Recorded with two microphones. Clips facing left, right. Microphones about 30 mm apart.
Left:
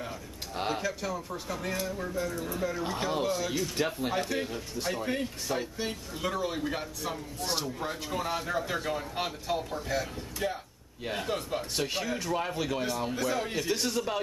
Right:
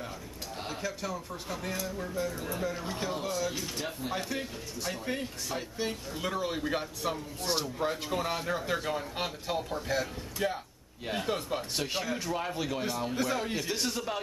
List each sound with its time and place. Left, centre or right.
0.6 s speech: left
0.8 s speech: centre
2.9 s speech: centre
3.7 s speech: left
4.1 s speech: centre